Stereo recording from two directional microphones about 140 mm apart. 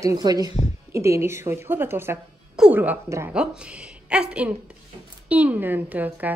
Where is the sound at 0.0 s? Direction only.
25° right (ahead or behind).